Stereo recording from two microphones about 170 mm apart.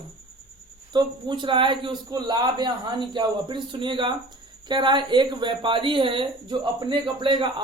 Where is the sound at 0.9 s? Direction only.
30° right (ahead or behind).